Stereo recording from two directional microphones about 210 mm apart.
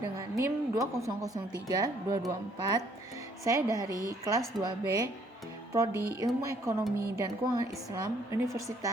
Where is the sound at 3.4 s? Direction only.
15° right (ahead or behind).